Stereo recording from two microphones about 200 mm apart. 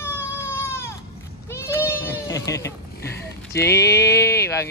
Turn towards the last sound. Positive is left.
turn(degrees=15)  # may be behind; listen again after turning